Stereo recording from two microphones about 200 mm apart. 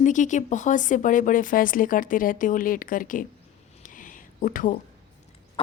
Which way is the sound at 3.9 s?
40° left (ahead or behind).